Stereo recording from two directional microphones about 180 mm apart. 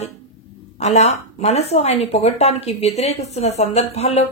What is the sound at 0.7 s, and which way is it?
Speech, 40° left (ahead or behind).